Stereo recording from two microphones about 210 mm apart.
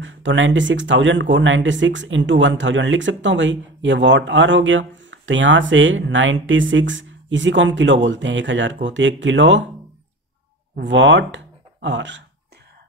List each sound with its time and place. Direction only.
0.0 s speech: 60° right (ahead or behind)
10.8 s speech: 60° right (ahead or behind)